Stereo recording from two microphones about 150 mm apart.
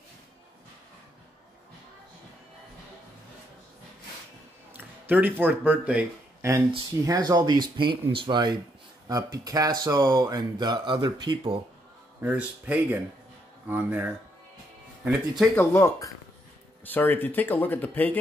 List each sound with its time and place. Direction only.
4.7 s speech: 10° right (ahead or behind)
7.1 s speech: 25° right (ahead or behind)
12.2 s speech: 10° right (ahead or behind)
15.0 s speech: centre (ahead or behind)
15.5 s speech: 15° left (ahead or behind)